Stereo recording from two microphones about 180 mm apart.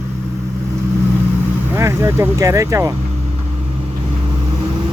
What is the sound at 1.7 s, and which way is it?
Speech, 15° right (ahead or behind).